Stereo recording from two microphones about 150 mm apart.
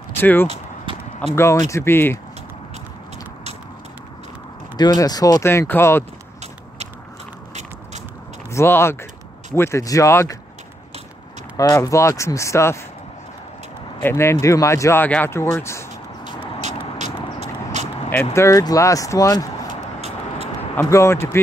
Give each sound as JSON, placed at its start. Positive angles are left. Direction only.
{"t": 0.1, "sound": "speech", "side_deg": 15}
{"t": 5.0, "sound": "speech", "side_deg": 25}
{"t": 8.5, "sound": "speech", "side_deg": 15}
{"t": 11.5, "sound": "speech", "side_deg": 25}
{"t": 14.0, "sound": "speech", "side_deg": 20}
{"t": 16.6, "sound": "vehicle", "side_deg": -50}
{"t": 18.1, "sound": "speech", "side_deg": 20}
{"t": 19.7, "sound": "vehicle", "side_deg": -45}
{"t": 20.7, "sound": "speech", "side_deg": 20}